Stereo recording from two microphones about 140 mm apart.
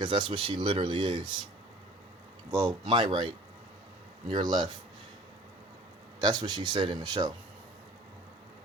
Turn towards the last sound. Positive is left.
turn(degrees=-30)  # may be behind; listen again after turning